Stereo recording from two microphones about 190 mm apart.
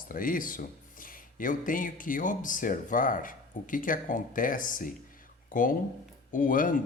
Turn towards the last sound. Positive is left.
turn(degrees=45)  # may be behind; listen again after turning